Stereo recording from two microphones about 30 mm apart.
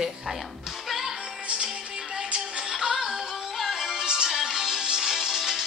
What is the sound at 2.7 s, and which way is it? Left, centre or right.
Music, centre.